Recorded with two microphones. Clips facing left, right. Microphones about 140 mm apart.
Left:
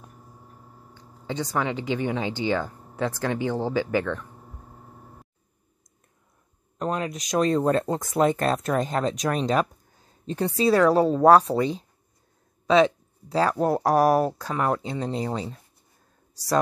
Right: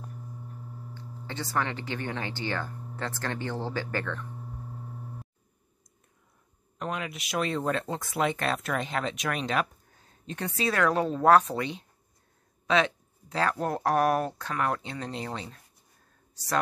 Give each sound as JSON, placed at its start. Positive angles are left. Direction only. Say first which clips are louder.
{"t": 0.9, "sound": "speech", "louder": "left 7 dB", "side_deg": 15}
{"t": 6.8, "sound": "speech", "louder": "left 6 dB", "side_deg": 35}